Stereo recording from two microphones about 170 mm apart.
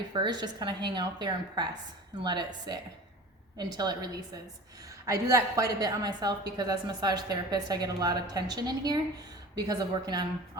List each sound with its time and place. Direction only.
0.1 s a woman's voice: 25° right (ahead or behind)